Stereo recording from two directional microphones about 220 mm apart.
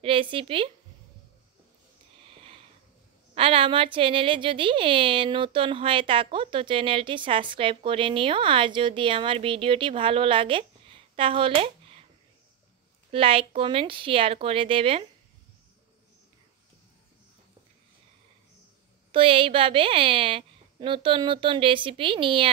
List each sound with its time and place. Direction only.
0.0 s a woman's voice: 25° right (ahead or behind)
3.3 s a woman's voice: 25° right (ahead or behind)
13.1 s a woman's voice: 25° right (ahead or behind)
19.1 s a woman's voice: 25° right (ahead or behind)